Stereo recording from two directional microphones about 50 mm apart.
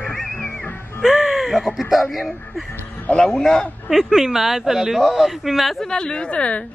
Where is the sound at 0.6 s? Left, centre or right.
Left.